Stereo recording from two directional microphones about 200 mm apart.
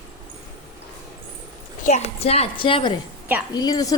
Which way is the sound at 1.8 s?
30° left (ahead or behind).